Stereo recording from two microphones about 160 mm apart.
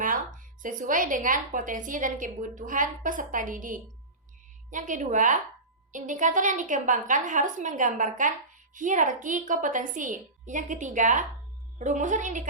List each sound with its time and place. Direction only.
0.0 s a woman's voice: 55° right (ahead or behind)